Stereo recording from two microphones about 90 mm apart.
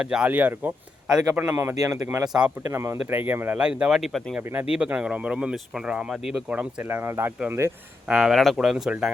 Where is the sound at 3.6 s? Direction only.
10° right (ahead or behind).